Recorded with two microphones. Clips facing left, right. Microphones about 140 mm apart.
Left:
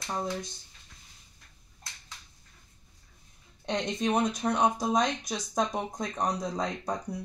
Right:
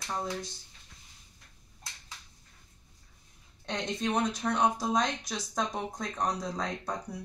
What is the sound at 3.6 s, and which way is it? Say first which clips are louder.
Speech: left 3 dB; 20° left (ahead or behind).